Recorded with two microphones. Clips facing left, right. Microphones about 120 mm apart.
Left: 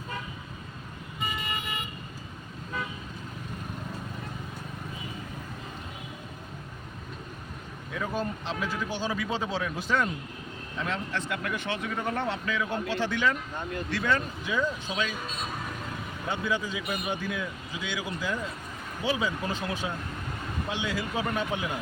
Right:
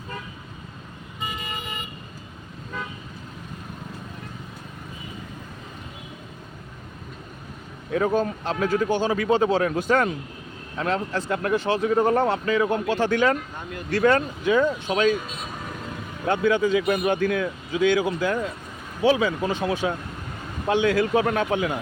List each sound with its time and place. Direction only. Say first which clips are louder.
7.9 s speech: right 9 dB; 50° right (ahead or behind)
10.8 s speech: right 7 dB; 40° right (ahead or behind); by 15.1 s 55° right (ahead or behind)
16.2 s speech: right 10 dB; 60° right (ahead or behind)
19.0 s speech: right 9 dB; 75° right (ahead or behind)